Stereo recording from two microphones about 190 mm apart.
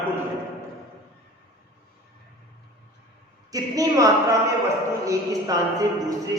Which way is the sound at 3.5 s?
20° right (ahead or behind).